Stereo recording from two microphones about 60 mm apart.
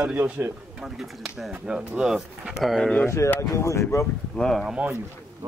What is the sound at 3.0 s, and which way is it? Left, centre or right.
Speech, left.